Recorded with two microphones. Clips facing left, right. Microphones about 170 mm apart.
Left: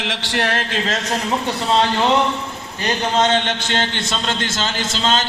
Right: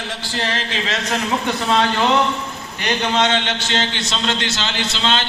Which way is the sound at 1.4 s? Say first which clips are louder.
Left 1 dB; 30° left (ahead or behind).